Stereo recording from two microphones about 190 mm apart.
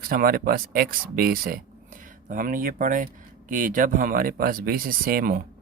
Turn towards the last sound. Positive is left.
turn(degrees=-50)  # may be behind; listen again after turning